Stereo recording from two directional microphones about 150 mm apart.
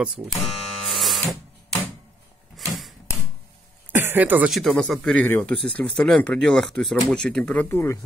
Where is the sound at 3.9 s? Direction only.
15° right (ahead or behind).